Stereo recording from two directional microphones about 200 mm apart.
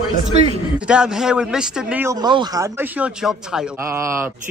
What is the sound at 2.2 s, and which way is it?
Speech, 20° right (ahead or behind).